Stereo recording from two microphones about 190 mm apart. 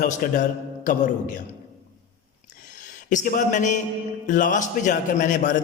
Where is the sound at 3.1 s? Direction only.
40° left (ahead or behind).